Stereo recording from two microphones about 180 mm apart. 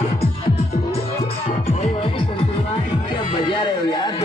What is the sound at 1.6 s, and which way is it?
Music, 40° left (ahead or behind).